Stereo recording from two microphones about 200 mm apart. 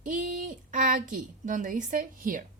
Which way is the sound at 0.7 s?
40° right (ahead or behind).